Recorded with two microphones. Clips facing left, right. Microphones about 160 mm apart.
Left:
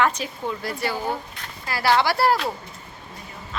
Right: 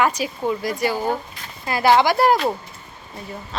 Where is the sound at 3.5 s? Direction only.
35° right (ahead or behind).